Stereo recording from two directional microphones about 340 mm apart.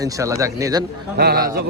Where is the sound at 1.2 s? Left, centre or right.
Right.